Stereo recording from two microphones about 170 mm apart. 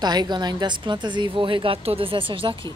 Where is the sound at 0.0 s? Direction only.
25° right (ahead or behind).